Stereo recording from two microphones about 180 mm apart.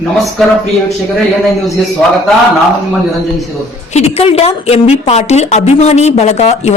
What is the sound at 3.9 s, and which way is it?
Speech, 35° left (ahead or behind).